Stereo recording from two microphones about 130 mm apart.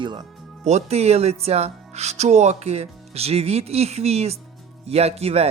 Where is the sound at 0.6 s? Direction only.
55° right (ahead or behind).